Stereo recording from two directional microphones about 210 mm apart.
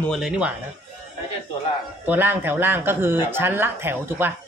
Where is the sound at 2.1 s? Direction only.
10° right (ahead or behind).